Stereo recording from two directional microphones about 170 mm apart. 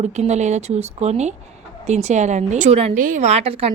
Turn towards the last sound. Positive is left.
turn(degrees=-35)  # may be behind; listen again after turning